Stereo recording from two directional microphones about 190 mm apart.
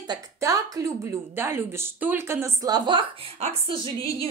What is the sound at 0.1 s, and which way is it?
A woman's voice, 15° right (ahead or behind).